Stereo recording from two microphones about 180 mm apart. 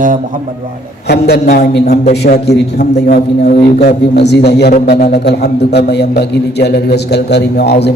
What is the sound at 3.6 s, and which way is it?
A man's voice, 60° left (ahead or behind).